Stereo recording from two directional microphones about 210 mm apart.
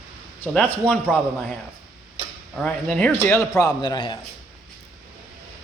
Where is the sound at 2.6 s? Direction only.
5° left (ahead or behind); by 4.2 s 20° left (ahead or behind).